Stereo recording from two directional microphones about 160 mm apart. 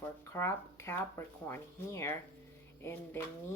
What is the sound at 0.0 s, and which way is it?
A woman's voice, 15° left (ahead or behind).